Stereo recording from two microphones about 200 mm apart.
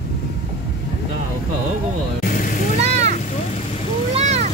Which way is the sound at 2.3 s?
40° left (ahead or behind).